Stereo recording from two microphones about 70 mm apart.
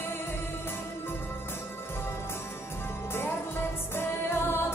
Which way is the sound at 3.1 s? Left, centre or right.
Left.